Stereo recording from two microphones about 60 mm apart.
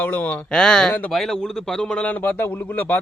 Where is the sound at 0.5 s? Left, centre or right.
Centre.